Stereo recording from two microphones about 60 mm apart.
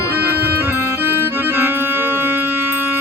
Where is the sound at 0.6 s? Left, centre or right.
Right.